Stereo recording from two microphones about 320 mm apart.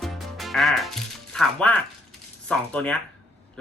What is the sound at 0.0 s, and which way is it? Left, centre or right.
Music, centre.